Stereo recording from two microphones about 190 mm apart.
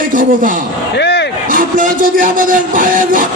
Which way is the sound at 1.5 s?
45° right (ahead or behind).